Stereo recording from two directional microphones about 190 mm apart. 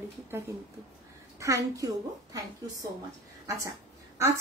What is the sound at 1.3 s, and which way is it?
A woman's voice, 15° right (ahead or behind).